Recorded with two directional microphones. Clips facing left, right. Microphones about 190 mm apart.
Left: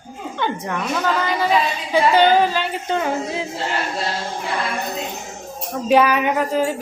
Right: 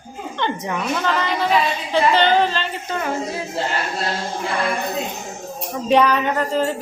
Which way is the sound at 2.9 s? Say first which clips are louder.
Left 2 dB; 20° left (ahead or behind).